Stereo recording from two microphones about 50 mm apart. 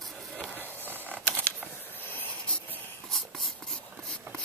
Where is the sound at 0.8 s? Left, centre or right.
Right.